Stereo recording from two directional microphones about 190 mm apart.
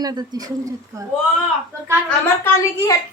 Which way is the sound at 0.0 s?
20° right (ahead or behind).